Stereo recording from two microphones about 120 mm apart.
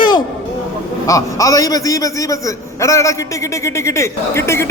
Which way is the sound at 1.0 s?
30° left (ahead or behind).